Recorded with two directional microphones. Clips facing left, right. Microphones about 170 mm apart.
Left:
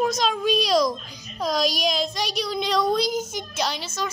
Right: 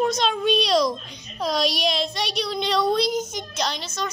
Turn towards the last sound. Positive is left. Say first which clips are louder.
# even
turn(degrees=5)  # may be behind; listen again after turning